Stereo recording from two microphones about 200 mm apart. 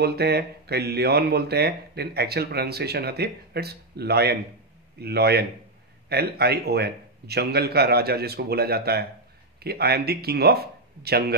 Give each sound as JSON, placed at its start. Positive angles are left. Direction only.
{"t": 0.0, "sound": "speech", "side_deg": -55}